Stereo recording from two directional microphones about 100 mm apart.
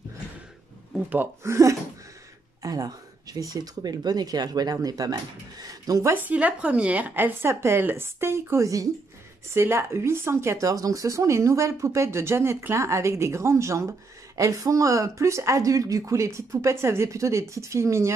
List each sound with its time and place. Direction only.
1.1 s speech: 25° right (ahead or behind)
6.2 s speech: 15° right (ahead or behind)